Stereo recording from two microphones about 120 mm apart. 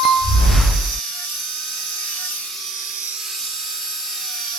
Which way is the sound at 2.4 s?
Centre (ahead or behind).